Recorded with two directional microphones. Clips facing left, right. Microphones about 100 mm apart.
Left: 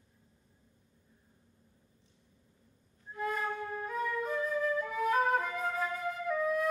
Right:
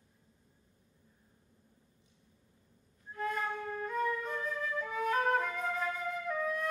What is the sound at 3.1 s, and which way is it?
Flute, 5° left (ahead or behind).